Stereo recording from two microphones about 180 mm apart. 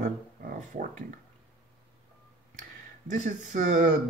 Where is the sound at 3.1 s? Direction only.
45° right (ahead or behind).